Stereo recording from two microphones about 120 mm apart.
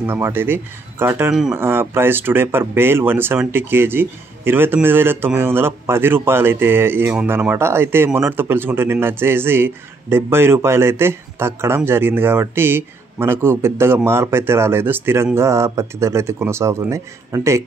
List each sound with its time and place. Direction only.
0.0 s speech: 20° right (ahead or behind)